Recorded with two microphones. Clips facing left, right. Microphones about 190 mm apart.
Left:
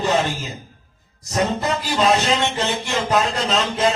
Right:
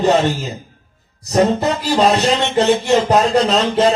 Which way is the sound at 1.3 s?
40° right (ahead or behind).